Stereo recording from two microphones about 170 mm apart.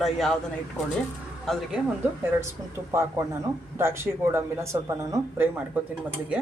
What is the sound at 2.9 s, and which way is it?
Speech, 15° right (ahead or behind).